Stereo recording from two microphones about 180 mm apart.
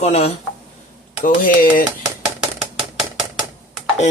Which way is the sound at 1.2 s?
50° left (ahead or behind).